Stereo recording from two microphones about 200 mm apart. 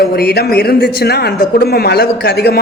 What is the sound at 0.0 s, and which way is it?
A man's voice, 50° left (ahead or behind).